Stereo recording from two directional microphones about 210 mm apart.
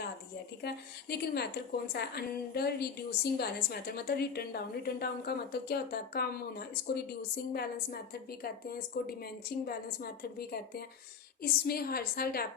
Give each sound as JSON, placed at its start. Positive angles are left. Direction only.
{"t": 0.6, "sound": "a woman's voice", "side_deg": 50}